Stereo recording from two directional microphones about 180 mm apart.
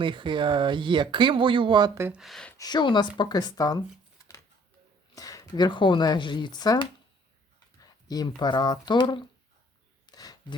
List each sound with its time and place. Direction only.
0.0 s speech: 25° right (ahead or behind)
2.0 s speech: 5° right (ahead or behind)
2.6 s speech: 25° left (ahead or behind)
5.1 s speech: 20° left (ahead or behind)
7.8 s a sound: 20° left (ahead or behind)
8.4 s speech: 25° left (ahead or behind)
10.1 s a sound: 20° left (ahead or behind)